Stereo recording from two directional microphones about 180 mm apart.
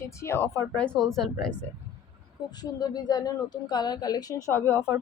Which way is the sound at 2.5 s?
20° left (ahead or behind).